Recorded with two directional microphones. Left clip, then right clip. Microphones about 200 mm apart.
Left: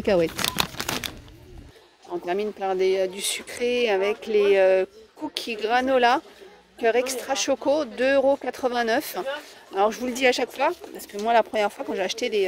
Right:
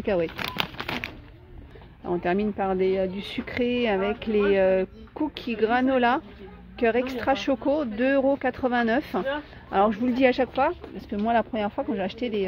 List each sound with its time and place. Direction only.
0.0 s speech: 20° left (ahead or behind)
0.8 s crumpling: 20° left (ahead or behind)
2.2 s speech: 20° left (ahead or behind)